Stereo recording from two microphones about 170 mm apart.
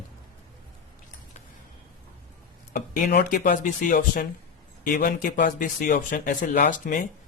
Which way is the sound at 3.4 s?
50° left (ahead or behind).